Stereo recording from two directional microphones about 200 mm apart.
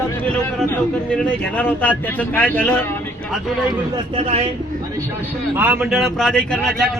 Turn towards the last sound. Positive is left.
turn(degrees=0)  # may be behind; listen again after turning